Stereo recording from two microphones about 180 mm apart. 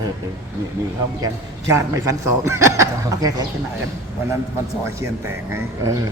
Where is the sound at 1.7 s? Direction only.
15° right (ahead or behind).